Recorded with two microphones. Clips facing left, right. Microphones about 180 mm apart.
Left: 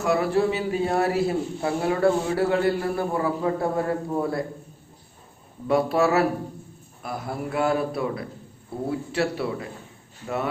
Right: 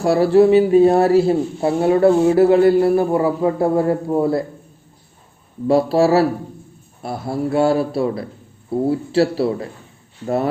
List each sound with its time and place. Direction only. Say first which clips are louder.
0.0 s speech: right 9 dB; 30° right (ahead or behind)
5.6 s speech: right 6 dB; 30° right (ahead or behind)